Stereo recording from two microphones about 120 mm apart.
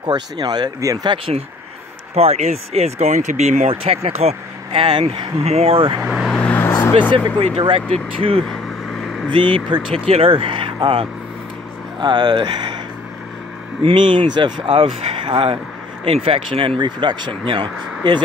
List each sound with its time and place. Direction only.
0.0 s speech: 40° right (ahead or behind)
0.7 s speech: 30° right (ahead or behind)
1.1 s speech: 50° right (ahead or behind)
2.1 s speech: 65° right (ahead or behind)
5.9 s speech: 10° right (ahead or behind)
6.2 s vehicle: 10° left (ahead or behind)
7.5 s speech: 50° right (ahead or behind)
13.8 s speech: 45° right (ahead or behind)